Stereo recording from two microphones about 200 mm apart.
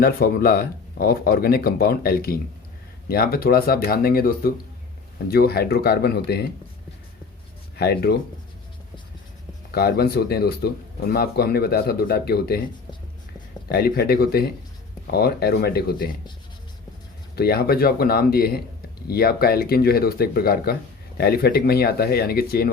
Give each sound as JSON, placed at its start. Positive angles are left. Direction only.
{"t": 0.0, "sound": "speech", "side_deg": 45}
{"t": 7.8, "sound": "speech", "side_deg": 50}
{"t": 9.7, "sound": "speech", "side_deg": 50}
{"t": 13.7, "sound": "speech", "side_deg": 50}
{"t": 17.3, "sound": "speech", "side_deg": 50}